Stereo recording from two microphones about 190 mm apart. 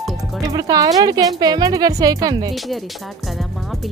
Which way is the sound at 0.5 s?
20° right (ahead or behind).